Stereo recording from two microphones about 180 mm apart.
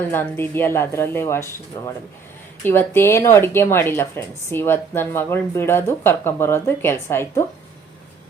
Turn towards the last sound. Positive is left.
turn(degrees=15)  # may be behind; listen again after turning